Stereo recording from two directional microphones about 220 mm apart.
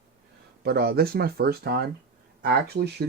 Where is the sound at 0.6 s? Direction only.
45° right (ahead or behind).